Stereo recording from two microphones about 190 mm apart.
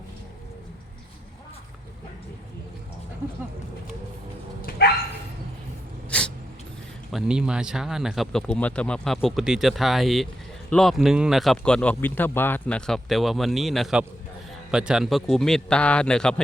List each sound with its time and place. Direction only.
4.8 s bow-wow: 55° left (ahead or behind)
6.1 s a sound: 5° left (ahead or behind)
7.1 s speech: 5° right (ahead or behind)